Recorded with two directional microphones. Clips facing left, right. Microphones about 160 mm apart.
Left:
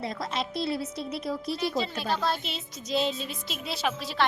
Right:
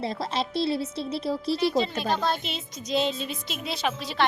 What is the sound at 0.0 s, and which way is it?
Speech, 30° right (ahead or behind).